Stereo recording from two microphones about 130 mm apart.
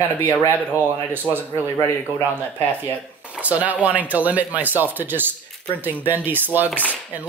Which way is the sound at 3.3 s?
10° right (ahead or behind).